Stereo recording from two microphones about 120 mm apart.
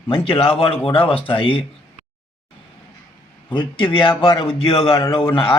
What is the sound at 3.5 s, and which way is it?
A man's voice, 45° left (ahead or behind).